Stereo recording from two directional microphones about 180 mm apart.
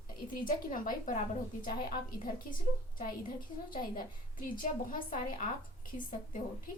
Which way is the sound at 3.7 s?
50° left (ahead or behind).